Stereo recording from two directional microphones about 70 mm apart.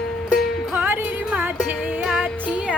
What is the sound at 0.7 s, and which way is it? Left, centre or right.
Music, right.